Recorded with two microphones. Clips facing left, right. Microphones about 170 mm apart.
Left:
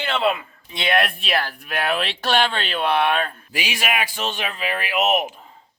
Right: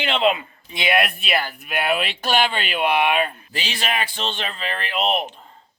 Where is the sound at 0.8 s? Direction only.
5° right (ahead or behind).